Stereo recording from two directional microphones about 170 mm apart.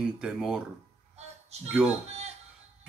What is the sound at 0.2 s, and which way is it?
Speech, 5° right (ahead or behind).